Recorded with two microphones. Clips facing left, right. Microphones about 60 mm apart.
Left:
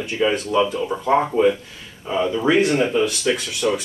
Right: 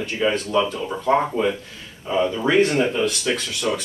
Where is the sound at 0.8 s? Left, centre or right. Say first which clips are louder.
Left 1 dB; centre.